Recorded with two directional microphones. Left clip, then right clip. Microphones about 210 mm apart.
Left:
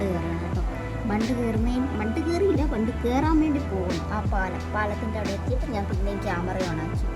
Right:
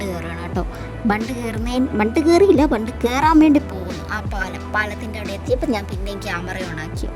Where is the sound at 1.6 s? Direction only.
45° right (ahead or behind).